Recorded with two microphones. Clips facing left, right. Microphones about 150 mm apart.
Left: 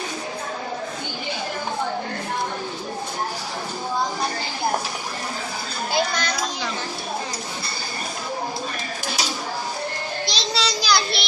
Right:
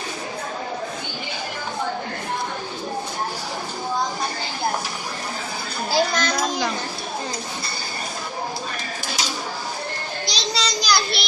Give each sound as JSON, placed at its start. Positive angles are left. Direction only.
{"t": 5.9, "sound": "a child's voice", "side_deg": -45}
{"t": 10.2, "sound": "child singing", "side_deg": 0}